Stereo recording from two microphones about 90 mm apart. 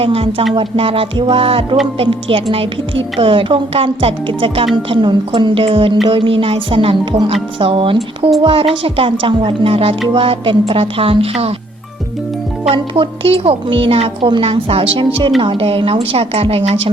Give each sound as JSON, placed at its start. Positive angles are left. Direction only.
{"t": 0.0, "sound": "a woman's voice", "side_deg": -90}
{"t": 6.1, "sound": "a woman's voice", "side_deg": -80}
{"t": 8.4, "sound": "a woman's voice", "side_deg": -90}
{"t": 12.7, "sound": "a woman's voice", "side_deg": -75}